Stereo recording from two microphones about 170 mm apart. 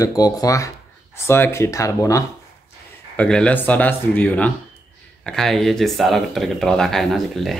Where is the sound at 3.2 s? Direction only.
5° left (ahead or behind).